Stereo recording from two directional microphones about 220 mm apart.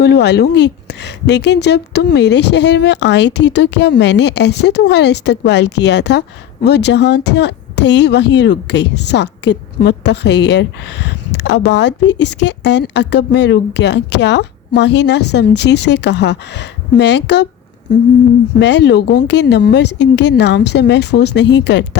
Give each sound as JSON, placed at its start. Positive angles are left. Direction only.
{"t": 0.0, "sound": "speech", "side_deg": 50}
{"t": 18.6, "sound": "speech", "side_deg": 50}